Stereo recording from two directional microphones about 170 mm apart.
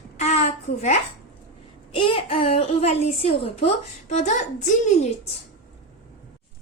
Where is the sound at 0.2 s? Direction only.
40° left (ahead or behind).